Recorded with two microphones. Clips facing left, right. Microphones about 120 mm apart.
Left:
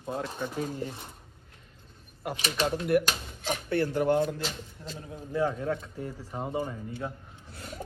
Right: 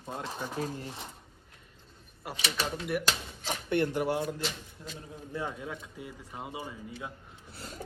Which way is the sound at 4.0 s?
10° right (ahead or behind).